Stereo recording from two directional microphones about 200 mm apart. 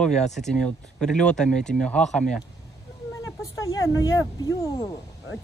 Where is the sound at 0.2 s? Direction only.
35° left (ahead or behind).